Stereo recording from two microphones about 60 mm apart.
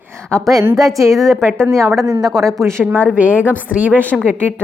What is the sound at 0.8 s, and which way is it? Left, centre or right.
Speech, right.